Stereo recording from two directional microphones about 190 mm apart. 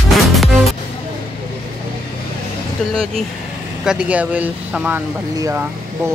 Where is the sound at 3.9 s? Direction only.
5° right (ahead or behind).